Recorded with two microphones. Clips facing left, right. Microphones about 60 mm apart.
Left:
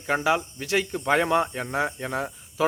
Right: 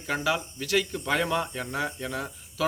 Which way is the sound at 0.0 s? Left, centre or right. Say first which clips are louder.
Left 4 dB; left.